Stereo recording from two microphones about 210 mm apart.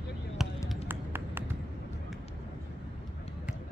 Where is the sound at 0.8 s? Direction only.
10° right (ahead or behind).